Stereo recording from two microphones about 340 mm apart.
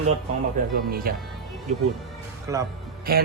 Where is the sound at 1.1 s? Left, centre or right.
Right.